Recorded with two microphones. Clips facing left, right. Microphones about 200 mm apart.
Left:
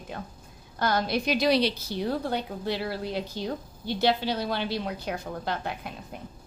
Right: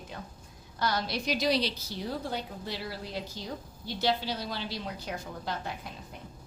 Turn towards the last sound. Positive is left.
turn(degrees=60)  # may be behind; listen again after turning